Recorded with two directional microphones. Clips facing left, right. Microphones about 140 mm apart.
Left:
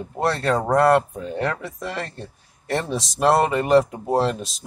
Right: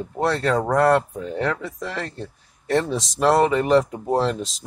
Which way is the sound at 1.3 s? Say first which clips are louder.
Right 1 dB; 5° left (ahead or behind).